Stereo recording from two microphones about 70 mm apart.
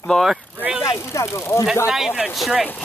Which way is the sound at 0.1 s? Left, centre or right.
Centre.